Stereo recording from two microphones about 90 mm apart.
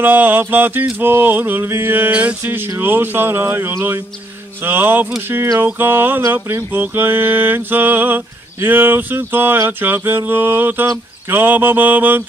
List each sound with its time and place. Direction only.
0.0 s music: 20° right (ahead or behind)